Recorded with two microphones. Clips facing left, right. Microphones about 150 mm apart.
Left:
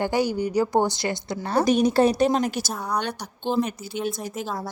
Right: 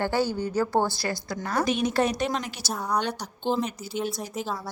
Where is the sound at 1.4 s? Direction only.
35° left (ahead or behind).